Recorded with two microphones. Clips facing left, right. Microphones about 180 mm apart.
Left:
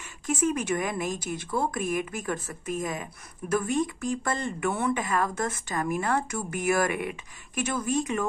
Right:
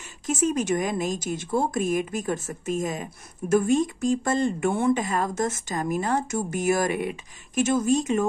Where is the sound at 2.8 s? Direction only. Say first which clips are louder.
Right 3 dB; 40° right (ahead or behind).